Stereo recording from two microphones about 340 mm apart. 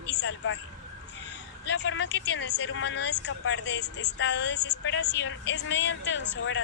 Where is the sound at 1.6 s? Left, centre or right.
Left.